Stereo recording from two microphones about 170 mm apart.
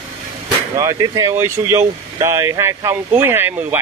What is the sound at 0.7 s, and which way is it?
Speech, 20° right (ahead or behind).